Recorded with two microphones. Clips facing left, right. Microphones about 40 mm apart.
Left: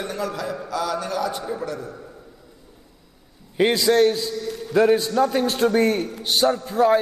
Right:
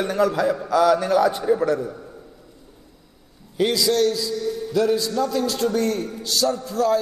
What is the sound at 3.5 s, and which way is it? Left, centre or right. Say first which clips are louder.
A man's voice: left 2 dB; left.